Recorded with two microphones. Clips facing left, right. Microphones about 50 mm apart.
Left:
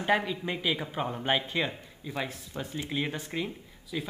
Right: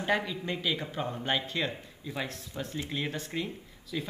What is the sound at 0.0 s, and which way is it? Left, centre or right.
Speech, centre.